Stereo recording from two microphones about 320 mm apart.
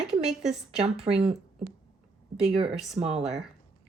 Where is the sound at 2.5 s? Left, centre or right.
Centre.